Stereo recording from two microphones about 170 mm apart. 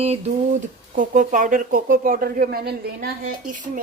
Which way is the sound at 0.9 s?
50° right (ahead or behind).